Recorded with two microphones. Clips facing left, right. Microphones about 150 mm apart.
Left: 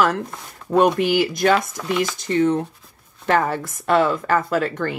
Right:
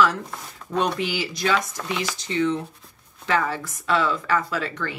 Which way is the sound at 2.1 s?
50° left (ahead or behind).